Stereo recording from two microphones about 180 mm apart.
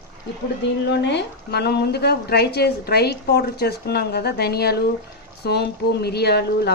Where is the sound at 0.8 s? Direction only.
75° left (ahead or behind).